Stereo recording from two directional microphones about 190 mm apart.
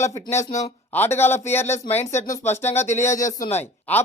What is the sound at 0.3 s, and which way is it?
Speech, 35° left (ahead or behind).